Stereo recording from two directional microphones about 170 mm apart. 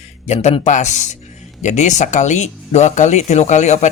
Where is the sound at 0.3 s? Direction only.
40° left (ahead or behind).